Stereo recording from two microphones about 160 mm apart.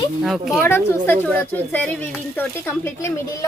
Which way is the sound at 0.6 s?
15° left (ahead or behind).